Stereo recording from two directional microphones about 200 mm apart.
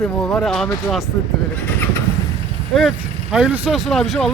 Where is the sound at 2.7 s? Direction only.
5° right (ahead or behind).